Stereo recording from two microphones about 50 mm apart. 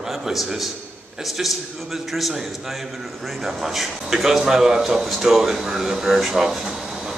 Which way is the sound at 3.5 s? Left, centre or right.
Centre.